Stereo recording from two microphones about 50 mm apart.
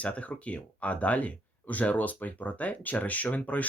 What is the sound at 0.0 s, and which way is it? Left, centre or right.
Speech, left.